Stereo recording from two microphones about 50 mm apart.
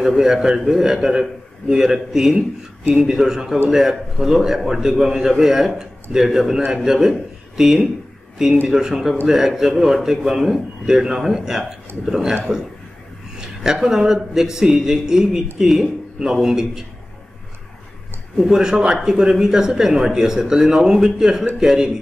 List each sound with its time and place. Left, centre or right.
0.0 s a man's voice: centre
13.4 s speech: centre
18.4 s speech: centre